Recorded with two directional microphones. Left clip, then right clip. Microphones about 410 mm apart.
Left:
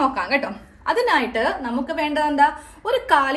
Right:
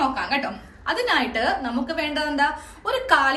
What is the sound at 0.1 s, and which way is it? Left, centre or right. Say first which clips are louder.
A woman's voice: left 2 dB; centre.